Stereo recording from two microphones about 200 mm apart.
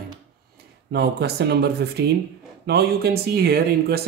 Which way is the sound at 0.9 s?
55° right (ahead or behind).